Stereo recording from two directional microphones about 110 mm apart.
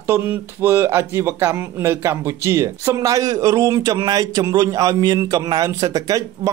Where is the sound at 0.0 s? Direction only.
20° right (ahead or behind).